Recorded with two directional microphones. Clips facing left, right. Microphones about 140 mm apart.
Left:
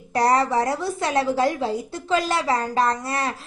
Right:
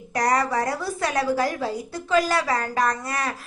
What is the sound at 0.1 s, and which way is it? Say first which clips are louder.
A woman's voice: left 3 dB; 30° left (ahead or behind).